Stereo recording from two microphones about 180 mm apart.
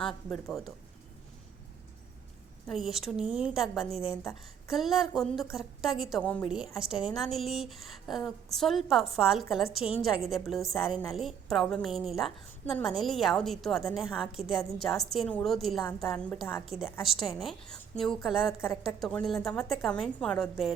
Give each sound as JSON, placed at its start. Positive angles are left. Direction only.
{"t": 0.1, "sound": "a woman's voice", "side_deg": 0}
{"t": 2.6, "sound": "a woman's voice", "side_deg": 0}
{"t": 4.1, "sound": "a woman's voice", "side_deg": 15}
{"t": 4.7, "sound": "a woman's voice", "side_deg": 0}
{"t": 18.6, "sound": "a woman's voice", "side_deg": 15}
{"t": 18.9, "sound": "a woman's voice", "side_deg": 0}